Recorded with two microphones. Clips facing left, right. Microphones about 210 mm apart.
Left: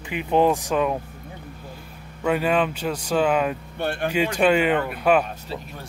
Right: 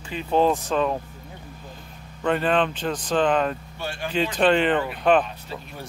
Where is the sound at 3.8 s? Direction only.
60° left (ahead or behind).